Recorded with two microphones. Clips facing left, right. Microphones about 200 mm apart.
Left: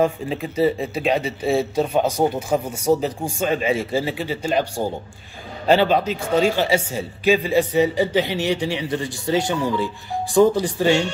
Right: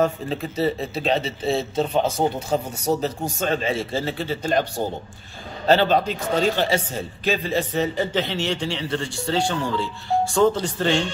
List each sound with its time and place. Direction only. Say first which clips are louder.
0.0 s a man's voice: left 2 dB; 10° left (ahead or behind)